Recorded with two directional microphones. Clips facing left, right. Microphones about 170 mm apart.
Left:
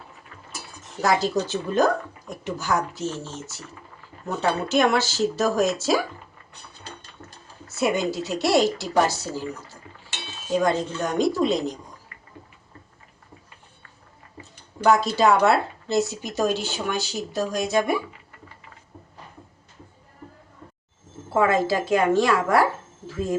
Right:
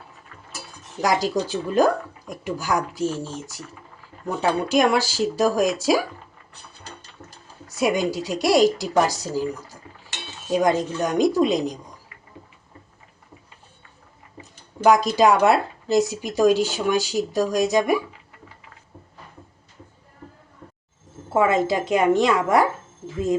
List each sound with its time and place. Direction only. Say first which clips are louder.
1.0 s speech: even; 15° right (ahead or behind)
7.2 s a sound: right 1 dB; 5° right (ahead or behind)
7.8 s speech: right 2 dB; 10° right (ahead or behind)
10.6 s speech: right 3 dB; 15° right (ahead or behind)
14.8 s speech: right 2 dB; 15° right (ahead or behind)
21.3 s a woman's voice: right 1 dB; 20° right (ahead or behind)
23.0 s a sound: right 3 dB; 20° right (ahead or behind)